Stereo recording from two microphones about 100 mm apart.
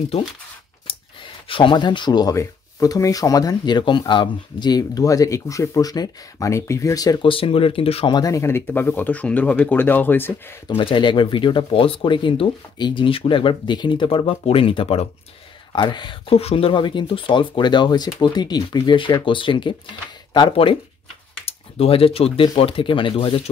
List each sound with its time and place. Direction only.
1.5 s speech: 55° left (ahead or behind)
2.3 s speech: 35° left (ahead or behind)
7.2 s speech: 60° left (ahead or behind)
8.1 s speech: 35° left (ahead or behind)
10.8 s speech: 55° left (ahead or behind)
15.7 s speech: 50° left (ahead or behind)
16.3 s speech: 80° left; by 19.7 s 55° left (ahead or behind)
21.5 s speech: 75° left (ahead or behind)